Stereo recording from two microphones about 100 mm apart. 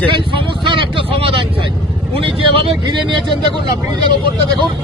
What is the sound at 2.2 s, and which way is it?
Speech, 60° right (ahead or behind).